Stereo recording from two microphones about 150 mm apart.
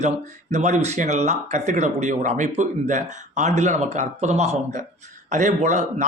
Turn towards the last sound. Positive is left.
turn(degrees=-50)  # may be behind; listen again after turning